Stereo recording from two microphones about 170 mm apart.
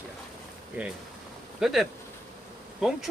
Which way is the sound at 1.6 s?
Centre (ahead or behind).